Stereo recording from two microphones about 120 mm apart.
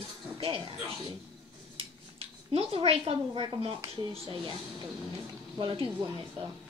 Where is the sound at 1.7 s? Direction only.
50° right (ahead or behind).